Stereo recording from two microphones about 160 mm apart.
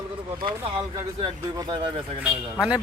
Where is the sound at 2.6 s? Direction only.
5° right (ahead or behind).